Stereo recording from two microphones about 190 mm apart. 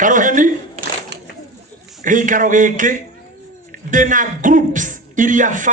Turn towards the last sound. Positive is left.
turn(degrees=-40)  # may be behind; listen again after turning